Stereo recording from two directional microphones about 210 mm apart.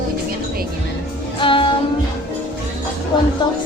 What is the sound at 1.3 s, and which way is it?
Music, 25° left (ahead or behind).